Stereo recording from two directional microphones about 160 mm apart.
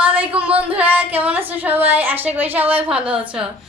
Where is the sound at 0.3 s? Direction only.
10° right (ahead or behind).